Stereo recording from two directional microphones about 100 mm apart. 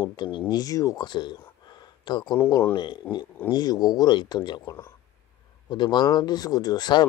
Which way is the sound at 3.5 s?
40° left (ahead or behind).